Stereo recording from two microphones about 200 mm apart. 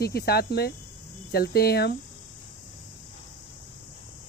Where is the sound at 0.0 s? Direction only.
50° left (ahead or behind).